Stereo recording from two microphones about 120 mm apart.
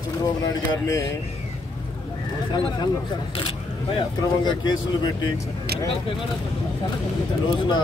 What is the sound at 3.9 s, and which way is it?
Speech, 40° left (ahead or behind).